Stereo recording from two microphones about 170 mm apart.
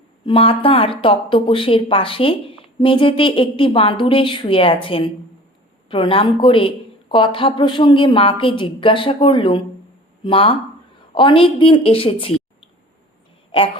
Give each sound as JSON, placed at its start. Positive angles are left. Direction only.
{"t": 0.3, "sound": "a woman's voice", "side_deg": 30}